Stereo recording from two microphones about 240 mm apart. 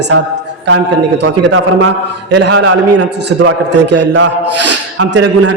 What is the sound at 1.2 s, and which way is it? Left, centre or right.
A man's voice, right.